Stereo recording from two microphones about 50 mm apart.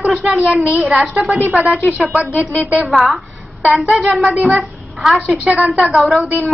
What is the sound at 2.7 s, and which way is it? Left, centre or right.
Speech, centre.